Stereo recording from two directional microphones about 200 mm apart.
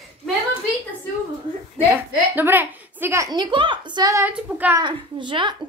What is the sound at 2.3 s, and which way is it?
A woman's voice, 10° right (ahead or behind).